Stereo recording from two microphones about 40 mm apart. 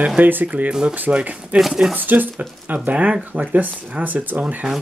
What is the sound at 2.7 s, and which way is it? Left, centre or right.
Speech, right.